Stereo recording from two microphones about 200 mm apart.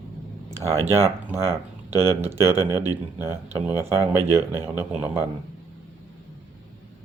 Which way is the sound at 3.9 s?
20° left (ahead or behind).